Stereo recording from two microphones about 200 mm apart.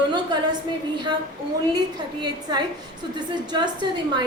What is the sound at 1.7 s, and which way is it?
Speech, 20° right (ahead or behind).